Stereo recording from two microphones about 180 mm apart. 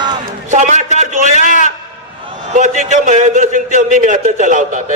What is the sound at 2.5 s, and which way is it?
A man's voice, 45° right (ahead or behind).